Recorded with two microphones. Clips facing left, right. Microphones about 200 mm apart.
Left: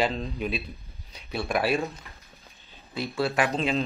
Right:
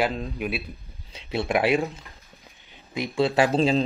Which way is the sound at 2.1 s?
15° right (ahead or behind).